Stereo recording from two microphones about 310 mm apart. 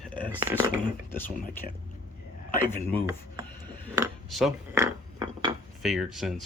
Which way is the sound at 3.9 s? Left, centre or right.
Centre.